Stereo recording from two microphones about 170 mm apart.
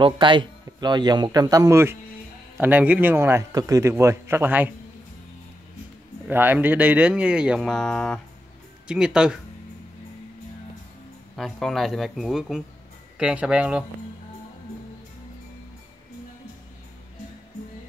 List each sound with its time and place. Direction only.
0.0 s a man's voice: 30° right (ahead or behind); by 4.7 s 10° right (ahead or behind)
6.2 s a man's voice: 10° right (ahead or behind); by 8.2 s 5° left (ahead or behind)
8.8 s speech: 5° right (ahead or behind)
11.3 s a man's voice: centre (ahead or behind)